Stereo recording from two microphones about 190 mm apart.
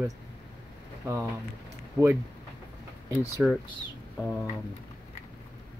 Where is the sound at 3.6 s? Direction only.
25° left (ahead or behind).